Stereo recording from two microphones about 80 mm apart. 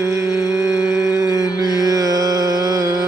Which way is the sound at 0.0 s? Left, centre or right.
Right.